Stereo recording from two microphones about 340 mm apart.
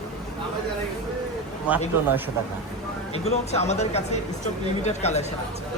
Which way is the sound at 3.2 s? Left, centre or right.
Centre.